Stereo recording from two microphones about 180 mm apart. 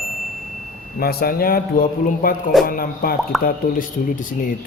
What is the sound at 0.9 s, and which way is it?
Speech, 55° left (ahead or behind).